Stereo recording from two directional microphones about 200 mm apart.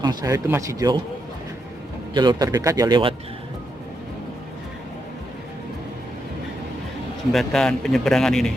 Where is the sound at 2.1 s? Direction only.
20° right (ahead or behind).